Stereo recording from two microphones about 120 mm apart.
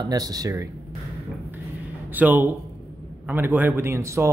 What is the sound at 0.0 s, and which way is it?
Speech, 35° right (ahead or behind).